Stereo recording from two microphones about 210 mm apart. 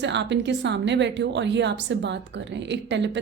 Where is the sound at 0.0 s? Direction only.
55° right (ahead or behind).